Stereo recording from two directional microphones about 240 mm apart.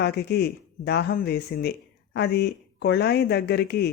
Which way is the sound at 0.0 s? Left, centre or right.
Left.